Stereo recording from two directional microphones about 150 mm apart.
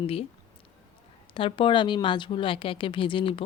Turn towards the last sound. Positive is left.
turn(degrees=35)  # may be behind; listen again after turning